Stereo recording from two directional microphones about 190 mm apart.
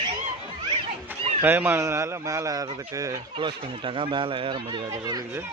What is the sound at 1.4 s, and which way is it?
Speech, 10° right (ahead or behind).